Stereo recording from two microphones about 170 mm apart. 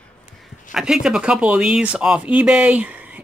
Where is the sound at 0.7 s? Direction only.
5° right (ahead or behind).